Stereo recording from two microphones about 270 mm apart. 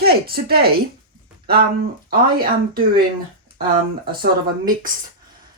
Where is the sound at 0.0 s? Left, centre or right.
Right.